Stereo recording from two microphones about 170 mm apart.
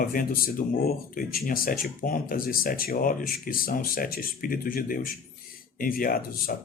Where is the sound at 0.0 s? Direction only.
55° left (ahead or behind).